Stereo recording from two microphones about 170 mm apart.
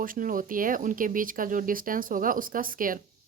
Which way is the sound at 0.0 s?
55° right (ahead or behind).